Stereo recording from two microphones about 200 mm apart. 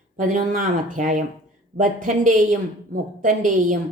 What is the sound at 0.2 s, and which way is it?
A woman's voice, 40° right (ahead or behind).